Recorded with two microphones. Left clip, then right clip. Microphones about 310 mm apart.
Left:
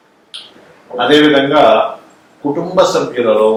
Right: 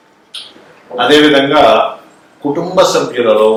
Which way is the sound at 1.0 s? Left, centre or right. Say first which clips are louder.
Right 2 dB; centre.